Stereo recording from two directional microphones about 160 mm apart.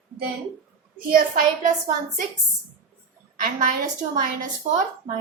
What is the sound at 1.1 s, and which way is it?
Speech, 60° right (ahead or behind).